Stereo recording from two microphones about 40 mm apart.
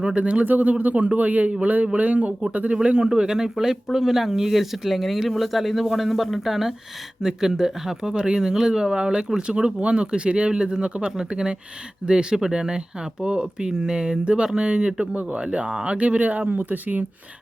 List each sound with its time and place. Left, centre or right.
0.0 s speech: right
0.4 s speech: right; by 8.1 s centre
8.1 s speech: right
9.0 s speech: right
15.1 s speech: right
16.5 s speech: right